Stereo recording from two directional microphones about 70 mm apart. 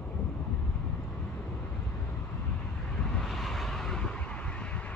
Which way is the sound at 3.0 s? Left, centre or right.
Centre.